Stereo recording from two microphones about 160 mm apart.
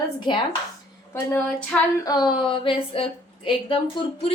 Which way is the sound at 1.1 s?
15° left (ahead or behind).